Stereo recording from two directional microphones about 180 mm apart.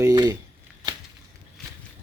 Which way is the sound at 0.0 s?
20° right (ahead or behind).